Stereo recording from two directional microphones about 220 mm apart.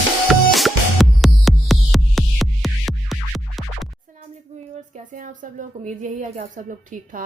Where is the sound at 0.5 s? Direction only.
Centre (ahead or behind).